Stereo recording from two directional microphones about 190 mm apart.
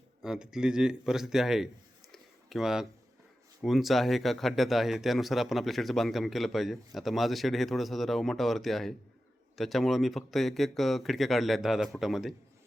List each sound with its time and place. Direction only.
0.2 s speech: 5° right (ahead or behind)
2.1 s a sound: centre (ahead or behind)
3.6 s speech: centre (ahead or behind)